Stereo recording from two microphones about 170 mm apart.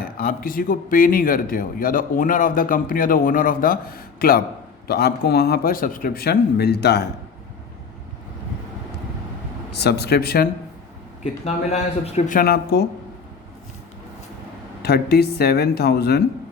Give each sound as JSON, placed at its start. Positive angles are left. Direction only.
{"t": 0.0, "sound": "a man's voice", "side_deg": 60}
{"t": 9.7, "sound": "speech", "side_deg": 75}
{"t": 11.2, "sound": "speech", "side_deg": 40}
{"t": 12.4, "sound": "a man's voice", "side_deg": 65}
{"t": 14.8, "sound": "speech", "side_deg": 70}